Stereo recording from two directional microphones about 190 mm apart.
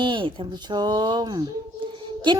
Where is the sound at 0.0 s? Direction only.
25° right (ahead or behind).